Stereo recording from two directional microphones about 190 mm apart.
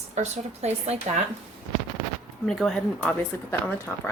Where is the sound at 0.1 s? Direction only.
35° right (ahead or behind).